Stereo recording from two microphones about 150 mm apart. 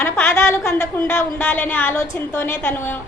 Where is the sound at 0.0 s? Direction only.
15° left (ahead or behind).